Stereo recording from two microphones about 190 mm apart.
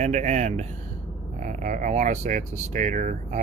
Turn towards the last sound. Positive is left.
turn(degrees=-40)  # may be behind; listen again after turning